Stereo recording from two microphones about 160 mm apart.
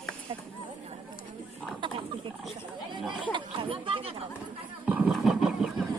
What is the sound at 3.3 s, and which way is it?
Chatter, 35° right (ahead or behind).